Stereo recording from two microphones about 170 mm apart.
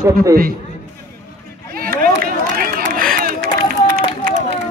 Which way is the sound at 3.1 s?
60° right (ahead or behind).